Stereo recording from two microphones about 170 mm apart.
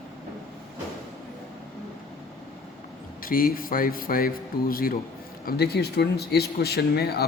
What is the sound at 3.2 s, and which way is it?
Speech, 55° left (ahead or behind).